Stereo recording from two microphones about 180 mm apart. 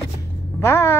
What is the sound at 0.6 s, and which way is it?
Speech, 15° left (ahead or behind).